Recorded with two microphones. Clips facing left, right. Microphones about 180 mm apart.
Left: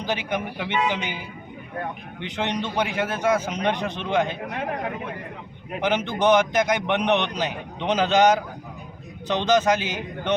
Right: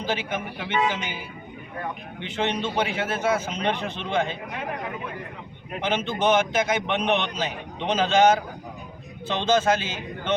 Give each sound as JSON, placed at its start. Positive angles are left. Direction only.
{"t": 0.0, "sound": "a man's voice", "side_deg": 15}
{"t": 2.2, "sound": "a man's voice", "side_deg": 15}
{"t": 5.8, "sound": "a man's voice", "side_deg": 15}
{"t": 9.2, "sound": "a man's voice", "side_deg": 15}